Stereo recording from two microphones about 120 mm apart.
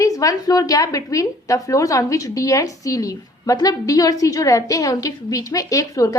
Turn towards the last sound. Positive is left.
turn(degrees=30)  # may be behind; listen again after turning